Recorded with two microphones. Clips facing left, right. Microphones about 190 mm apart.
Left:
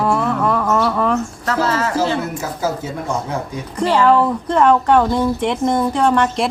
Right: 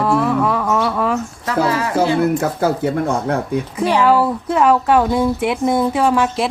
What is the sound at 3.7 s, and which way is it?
Speech, 15° right (ahead or behind).